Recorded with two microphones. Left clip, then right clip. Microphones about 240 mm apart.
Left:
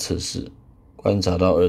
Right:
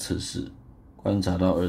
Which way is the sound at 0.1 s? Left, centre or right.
Left.